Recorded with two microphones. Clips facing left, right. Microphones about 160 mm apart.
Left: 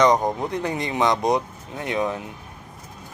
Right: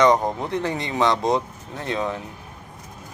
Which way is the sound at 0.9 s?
15° left (ahead or behind).